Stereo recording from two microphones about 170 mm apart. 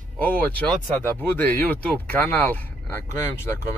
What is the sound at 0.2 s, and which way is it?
Speech, 10° left (ahead or behind).